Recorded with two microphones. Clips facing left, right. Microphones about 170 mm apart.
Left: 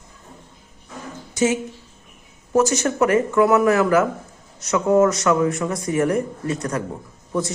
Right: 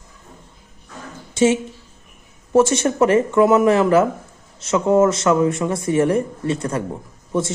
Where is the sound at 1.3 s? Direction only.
25° right (ahead or behind).